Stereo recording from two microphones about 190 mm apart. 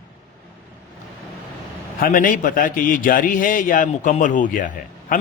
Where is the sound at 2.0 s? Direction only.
45° left (ahead or behind).